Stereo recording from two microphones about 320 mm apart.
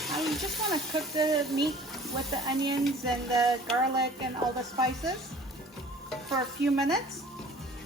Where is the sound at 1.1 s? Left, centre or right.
Centre.